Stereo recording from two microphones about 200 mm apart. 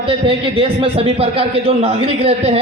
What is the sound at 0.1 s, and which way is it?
A man's voice, 25° right (ahead or behind).